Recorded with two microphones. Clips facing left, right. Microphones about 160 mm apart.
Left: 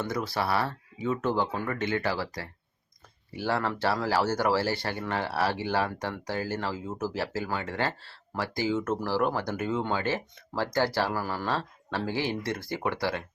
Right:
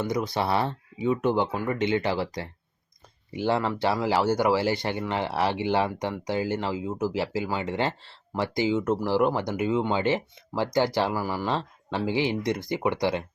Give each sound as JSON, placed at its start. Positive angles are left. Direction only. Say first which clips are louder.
{"t": 0.0, "sound": "speech", "louder": "right 3 dB", "side_deg": -15}